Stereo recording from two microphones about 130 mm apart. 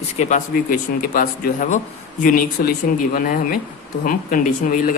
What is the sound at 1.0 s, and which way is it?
Speech, 85° left.